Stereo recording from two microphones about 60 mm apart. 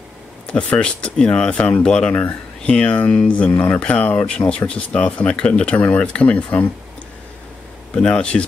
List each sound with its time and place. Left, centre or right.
0.5 s speech: left
7.9 s speech: centre